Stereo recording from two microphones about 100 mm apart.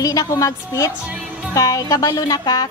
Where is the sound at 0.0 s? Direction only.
35° left (ahead or behind).